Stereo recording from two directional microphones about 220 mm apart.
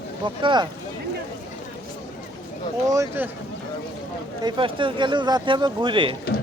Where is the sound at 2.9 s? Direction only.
15° right (ahead or behind).